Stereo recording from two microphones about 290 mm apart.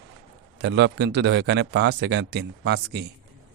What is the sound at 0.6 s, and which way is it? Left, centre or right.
Speech, right.